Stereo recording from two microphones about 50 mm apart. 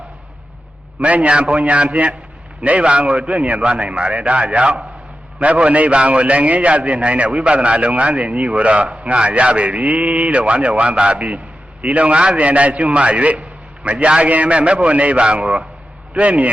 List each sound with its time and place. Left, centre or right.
1.0 s a man's voice: right